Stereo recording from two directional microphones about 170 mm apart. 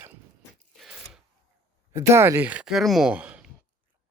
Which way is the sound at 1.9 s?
15° right (ahead or behind).